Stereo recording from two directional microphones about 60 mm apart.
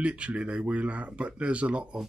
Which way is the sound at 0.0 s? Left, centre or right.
Centre.